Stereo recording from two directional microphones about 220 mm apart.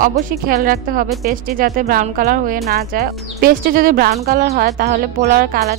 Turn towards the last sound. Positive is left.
turn(degrees=-45)  # may be behind; listen again after turning